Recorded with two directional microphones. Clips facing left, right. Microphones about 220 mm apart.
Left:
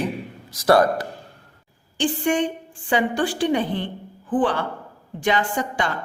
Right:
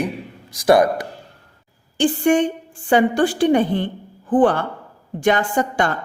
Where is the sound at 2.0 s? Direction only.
45° right (ahead or behind).